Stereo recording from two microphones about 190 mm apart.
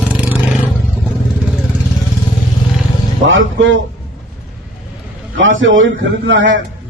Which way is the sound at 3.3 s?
85° right.